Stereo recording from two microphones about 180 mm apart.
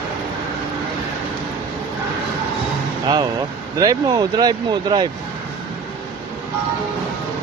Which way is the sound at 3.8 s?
20° right (ahead or behind).